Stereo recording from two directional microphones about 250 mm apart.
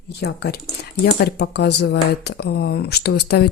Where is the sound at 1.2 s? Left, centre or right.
Left.